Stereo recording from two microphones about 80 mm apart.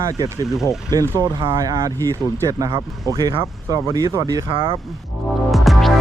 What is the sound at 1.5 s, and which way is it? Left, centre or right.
Speech, right.